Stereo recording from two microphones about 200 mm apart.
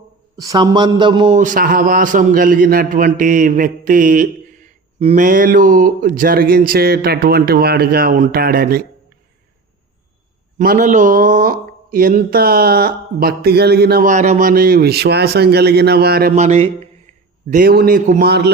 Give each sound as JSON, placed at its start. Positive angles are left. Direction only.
{"t": 0.3, "sound": "a man's voice", "side_deg": -20}
{"t": 1.4, "sound": "a man's voice", "side_deg": -40}
{"t": 10.6, "sound": "a man's voice", "side_deg": -45}
{"t": 16.3, "sound": "speech", "side_deg": -35}
{"t": 17.5, "sound": "a man's voice", "side_deg": -50}
{"t": 18.3, "sound": "speech", "side_deg": -55}